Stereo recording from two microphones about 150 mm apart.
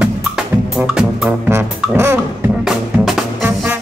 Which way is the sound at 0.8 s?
5° right (ahead or behind).